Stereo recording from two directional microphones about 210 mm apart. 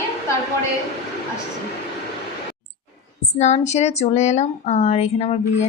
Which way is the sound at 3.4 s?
30° left (ahead or behind).